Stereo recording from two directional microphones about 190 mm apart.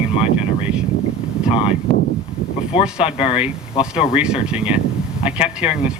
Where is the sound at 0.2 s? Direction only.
5° right (ahead or behind).